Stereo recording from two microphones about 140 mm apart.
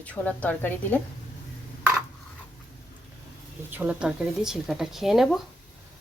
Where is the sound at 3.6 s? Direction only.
10° right (ahead or behind).